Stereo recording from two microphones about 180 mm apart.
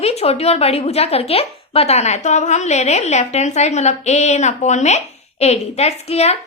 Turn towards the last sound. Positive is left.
turn(degrees=35)  # may be behind; listen again after turning